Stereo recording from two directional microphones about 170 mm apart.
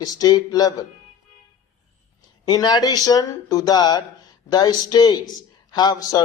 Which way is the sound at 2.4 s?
25° left (ahead or behind).